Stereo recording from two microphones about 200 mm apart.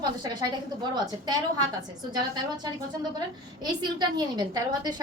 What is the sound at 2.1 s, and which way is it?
A woman's voice, 20° right (ahead or behind).